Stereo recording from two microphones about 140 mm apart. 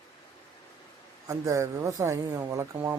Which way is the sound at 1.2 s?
20° right (ahead or behind).